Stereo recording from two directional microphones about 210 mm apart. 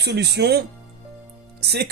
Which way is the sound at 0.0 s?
55° right (ahead or behind).